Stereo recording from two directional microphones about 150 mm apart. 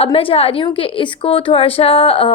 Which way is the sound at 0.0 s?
40° left (ahead or behind).